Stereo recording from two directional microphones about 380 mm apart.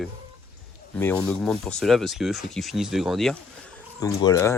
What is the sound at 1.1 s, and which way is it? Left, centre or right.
Speech, centre.